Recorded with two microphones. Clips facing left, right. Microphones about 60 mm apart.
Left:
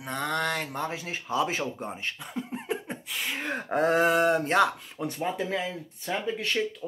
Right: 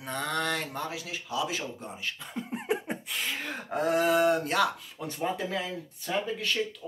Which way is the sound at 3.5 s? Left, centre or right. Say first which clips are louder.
Left 4 dB; left.